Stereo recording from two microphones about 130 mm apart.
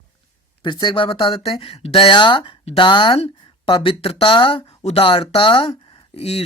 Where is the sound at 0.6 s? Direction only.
35° left (ahead or behind).